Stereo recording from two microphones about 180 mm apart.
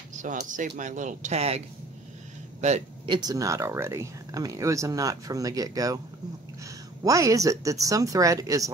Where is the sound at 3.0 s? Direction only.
25° right (ahead or behind).